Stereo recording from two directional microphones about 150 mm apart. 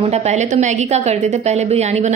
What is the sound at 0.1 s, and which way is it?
A woman's voice, 50° right (ahead or behind).